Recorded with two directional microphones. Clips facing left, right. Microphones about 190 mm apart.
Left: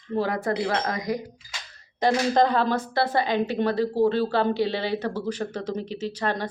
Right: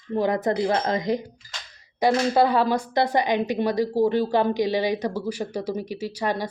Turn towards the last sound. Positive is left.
turn(degrees=-10)  # may be behind; listen again after turning